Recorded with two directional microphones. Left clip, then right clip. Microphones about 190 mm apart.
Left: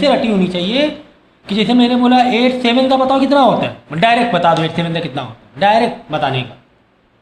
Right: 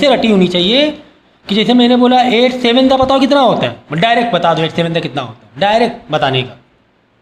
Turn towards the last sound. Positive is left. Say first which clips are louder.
# right 4 dB
turn(degrees=-25)  # may be behind; listen again after turning